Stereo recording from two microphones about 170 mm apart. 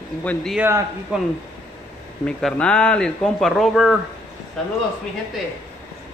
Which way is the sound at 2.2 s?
5° left (ahead or behind).